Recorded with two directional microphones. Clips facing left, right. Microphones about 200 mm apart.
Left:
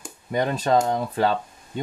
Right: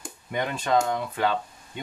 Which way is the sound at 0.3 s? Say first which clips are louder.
Left 4 dB; 35° left (ahead or behind).